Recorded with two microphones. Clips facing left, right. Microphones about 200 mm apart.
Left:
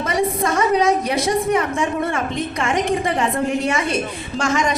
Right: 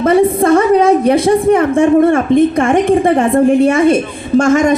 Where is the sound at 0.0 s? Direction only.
55° right (ahead or behind).